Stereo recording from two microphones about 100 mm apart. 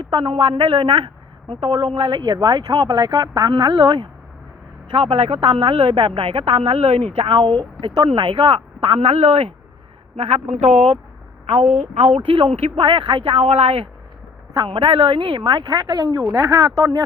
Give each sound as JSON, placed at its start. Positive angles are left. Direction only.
{"t": 0.0, "sound": "a woman's voice", "side_deg": -60}
{"t": 4.9, "sound": "speech", "side_deg": -65}
{"t": 12.3, "sound": "speech", "side_deg": -75}
{"t": 14.5, "sound": "a woman's voice", "side_deg": -50}